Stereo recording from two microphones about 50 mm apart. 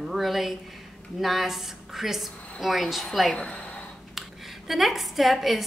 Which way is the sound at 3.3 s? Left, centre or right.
Centre.